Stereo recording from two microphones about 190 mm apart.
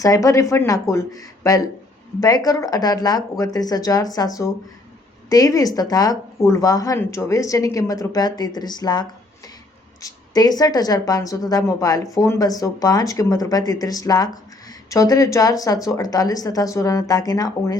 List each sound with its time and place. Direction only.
0.0 s speech: 15° left (ahead or behind)